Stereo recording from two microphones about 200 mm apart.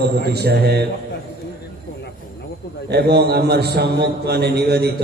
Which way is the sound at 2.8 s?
55° right (ahead or behind).